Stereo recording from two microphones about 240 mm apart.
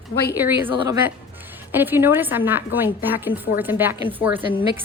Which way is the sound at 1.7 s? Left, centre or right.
Centre.